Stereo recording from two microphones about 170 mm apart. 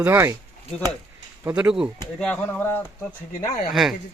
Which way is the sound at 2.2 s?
10° left (ahead or behind).